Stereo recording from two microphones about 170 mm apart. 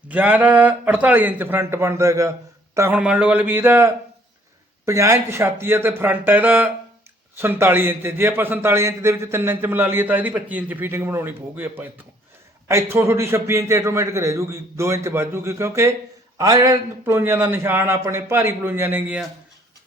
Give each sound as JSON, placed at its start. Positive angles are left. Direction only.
{"t": 0.1, "sound": "a man's voice", "side_deg": -10}